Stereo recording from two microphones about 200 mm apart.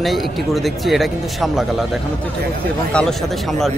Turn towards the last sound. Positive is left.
turn(degrees=0)  # may be behind; listen again after turning